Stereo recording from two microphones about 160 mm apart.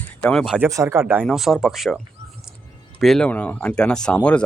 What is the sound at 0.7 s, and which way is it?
Speech, 20° right (ahead or behind).